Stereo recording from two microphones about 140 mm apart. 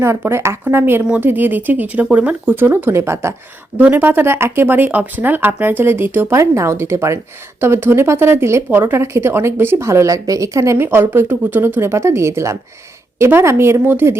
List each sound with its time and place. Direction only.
0.3 s a woman's voice: 20° right (ahead or behind)